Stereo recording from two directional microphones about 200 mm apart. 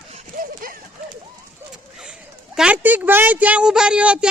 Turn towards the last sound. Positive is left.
turn(degrees=-5)  # may be behind; listen again after turning